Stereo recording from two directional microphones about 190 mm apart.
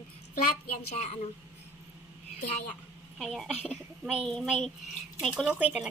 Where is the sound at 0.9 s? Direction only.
35° left (ahead or behind).